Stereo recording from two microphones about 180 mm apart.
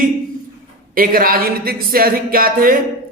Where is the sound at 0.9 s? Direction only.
50° right (ahead or behind).